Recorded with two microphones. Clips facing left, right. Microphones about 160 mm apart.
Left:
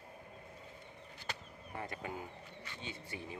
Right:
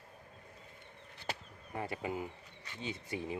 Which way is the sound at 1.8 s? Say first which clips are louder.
Right 5 dB; 25° right (ahead or behind).